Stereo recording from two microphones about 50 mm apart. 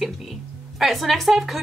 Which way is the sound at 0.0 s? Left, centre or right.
Centre.